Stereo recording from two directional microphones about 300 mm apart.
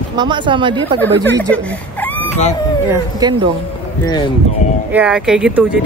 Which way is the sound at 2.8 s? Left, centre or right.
Centre.